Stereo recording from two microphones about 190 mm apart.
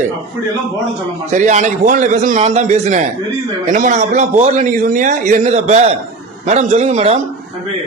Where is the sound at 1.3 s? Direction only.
40° right (ahead or behind).